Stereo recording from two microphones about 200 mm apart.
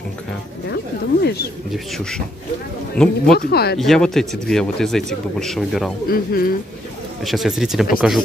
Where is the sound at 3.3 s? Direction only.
50° left (ahead or behind).